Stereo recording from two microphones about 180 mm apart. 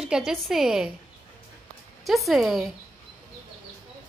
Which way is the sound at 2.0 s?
Centre (ahead or behind).